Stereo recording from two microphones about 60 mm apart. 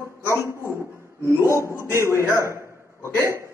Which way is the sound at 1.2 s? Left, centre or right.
Left.